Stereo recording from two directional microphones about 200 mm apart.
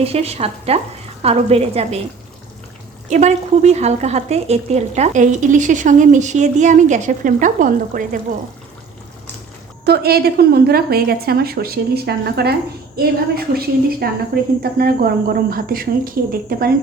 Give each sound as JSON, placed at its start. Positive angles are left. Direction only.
{"t": 0.0, "sound": "a woman's voice", "side_deg": -30}
{"t": 3.1, "sound": "a woman's voice", "side_deg": -35}
{"t": 9.8, "sound": "a woman's voice", "side_deg": -50}